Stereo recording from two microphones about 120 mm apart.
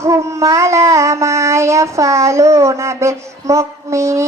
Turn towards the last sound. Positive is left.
turn(degrees=-25)  # may be behind; listen again after turning